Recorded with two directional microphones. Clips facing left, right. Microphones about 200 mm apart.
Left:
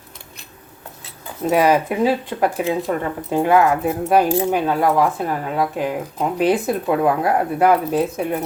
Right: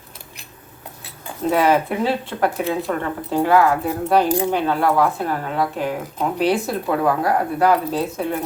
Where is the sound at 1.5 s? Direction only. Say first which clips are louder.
Left 1 dB; 15° left (ahead or behind).